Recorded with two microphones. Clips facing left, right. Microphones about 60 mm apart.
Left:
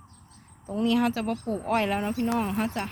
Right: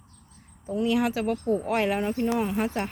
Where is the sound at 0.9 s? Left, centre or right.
Centre.